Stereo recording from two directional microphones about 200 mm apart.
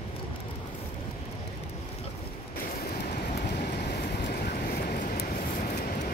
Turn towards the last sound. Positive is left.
turn(degrees=45)  # may be behind; listen again after turning